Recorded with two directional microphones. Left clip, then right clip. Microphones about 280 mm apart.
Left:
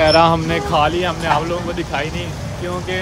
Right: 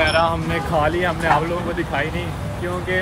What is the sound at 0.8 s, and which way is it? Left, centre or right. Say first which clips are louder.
Speech: left 2 dB; centre.